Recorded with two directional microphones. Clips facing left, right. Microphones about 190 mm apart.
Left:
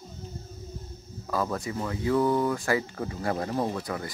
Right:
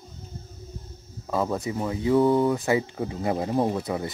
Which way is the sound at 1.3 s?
20° right (ahead or behind).